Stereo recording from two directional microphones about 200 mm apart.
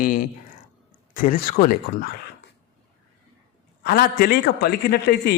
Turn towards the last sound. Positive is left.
turn(degrees=55)  # may be behind; listen again after turning